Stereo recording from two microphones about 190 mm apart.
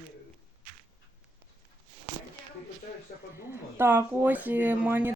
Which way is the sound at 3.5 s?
10° right (ahead or behind).